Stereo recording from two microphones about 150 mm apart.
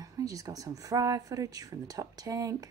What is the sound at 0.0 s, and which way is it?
Speech, 25° right (ahead or behind).